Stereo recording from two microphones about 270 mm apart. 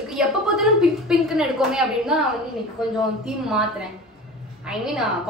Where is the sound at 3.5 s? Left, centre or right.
Centre.